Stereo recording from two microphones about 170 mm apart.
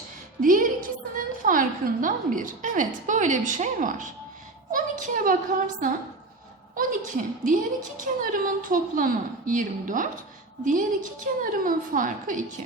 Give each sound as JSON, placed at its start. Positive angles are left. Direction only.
{"t": 0.4, "sound": "a woman's voice", "side_deg": -55}